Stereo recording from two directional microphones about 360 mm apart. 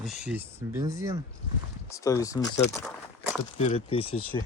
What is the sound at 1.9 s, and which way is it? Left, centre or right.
Speech, centre.